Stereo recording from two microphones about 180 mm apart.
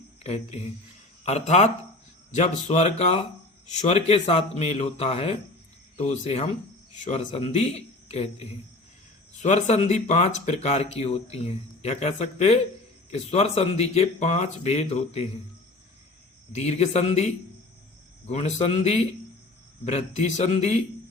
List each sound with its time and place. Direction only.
0.2 s speech: 35° left (ahead or behind)
16.5 s speech: 40° left (ahead or behind)